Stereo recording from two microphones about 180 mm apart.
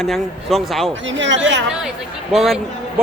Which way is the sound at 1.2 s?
90° right.